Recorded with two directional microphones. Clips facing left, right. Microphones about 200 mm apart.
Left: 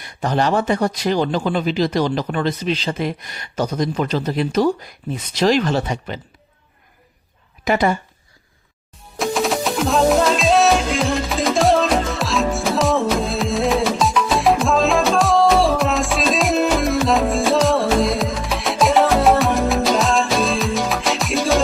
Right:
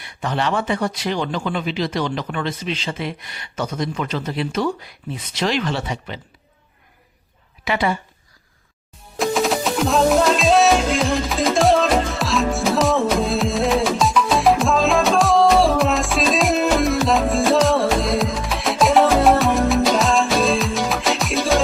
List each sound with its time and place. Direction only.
0.0 s speech: 40° left (ahead or behind)
7.6 s a woman's voice: 45° left (ahead or behind)
9.1 s music: centre (ahead or behind)